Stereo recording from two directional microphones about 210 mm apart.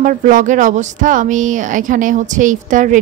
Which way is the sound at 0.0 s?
40° right (ahead or behind).